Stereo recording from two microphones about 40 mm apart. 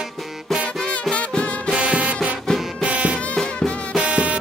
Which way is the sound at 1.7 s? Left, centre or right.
Right.